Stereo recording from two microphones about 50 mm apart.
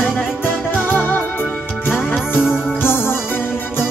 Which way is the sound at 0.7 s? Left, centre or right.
Left.